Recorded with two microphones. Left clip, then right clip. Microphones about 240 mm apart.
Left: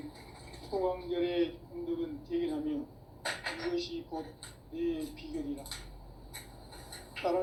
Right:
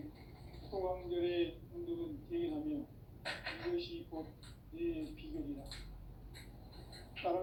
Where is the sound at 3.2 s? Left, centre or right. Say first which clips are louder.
Left 6 dB; left.